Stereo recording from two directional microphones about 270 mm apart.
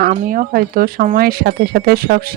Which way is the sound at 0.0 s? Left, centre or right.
Right.